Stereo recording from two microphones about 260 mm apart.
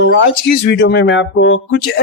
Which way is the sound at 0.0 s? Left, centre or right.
Left.